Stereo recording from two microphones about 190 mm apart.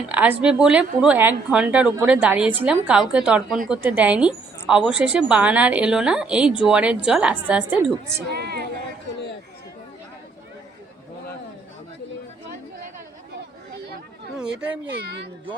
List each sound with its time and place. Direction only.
0.1 s a woman's voice: 5° right (ahead or behind)
14.8 s speech: 60° right (ahead or behind)